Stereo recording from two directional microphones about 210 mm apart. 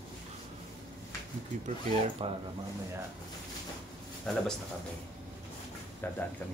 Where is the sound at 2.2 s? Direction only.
25° right (ahead or behind).